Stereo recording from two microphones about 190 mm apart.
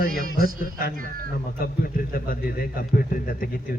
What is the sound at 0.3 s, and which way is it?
A man's voice, 50° left (ahead or behind).